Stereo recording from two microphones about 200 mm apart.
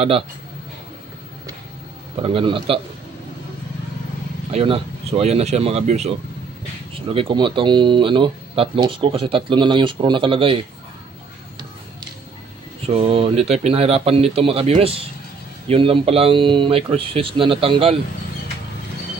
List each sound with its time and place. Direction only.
2.2 s speech: 25° right (ahead or behind)
4.5 s speech: 30° right (ahead or behind)
12.8 s speech: 30° right (ahead or behind)